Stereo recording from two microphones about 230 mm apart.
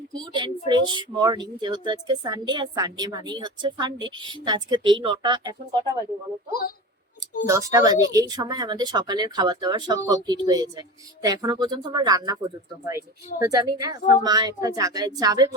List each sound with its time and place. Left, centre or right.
0.1 s speech: centre
6.5 s a woman's voice: left
7.4 s speech: centre